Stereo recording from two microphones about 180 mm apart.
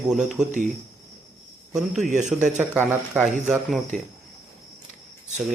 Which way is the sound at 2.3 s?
Centre (ahead or behind).